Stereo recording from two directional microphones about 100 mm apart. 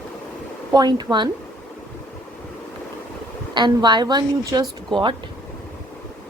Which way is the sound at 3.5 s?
50° right (ahead or behind).